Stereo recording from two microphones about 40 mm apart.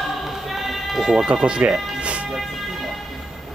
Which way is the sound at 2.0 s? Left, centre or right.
Right.